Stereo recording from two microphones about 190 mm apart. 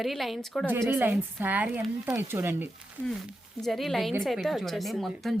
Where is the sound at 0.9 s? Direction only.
10° right (ahead or behind).